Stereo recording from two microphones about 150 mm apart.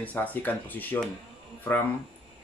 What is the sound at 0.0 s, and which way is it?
Speech, 10° left (ahead or behind).